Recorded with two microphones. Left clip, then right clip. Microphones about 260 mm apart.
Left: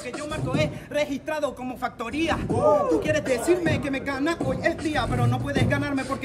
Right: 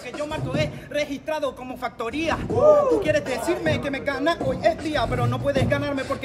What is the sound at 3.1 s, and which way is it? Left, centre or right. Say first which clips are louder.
Speech: even; centre.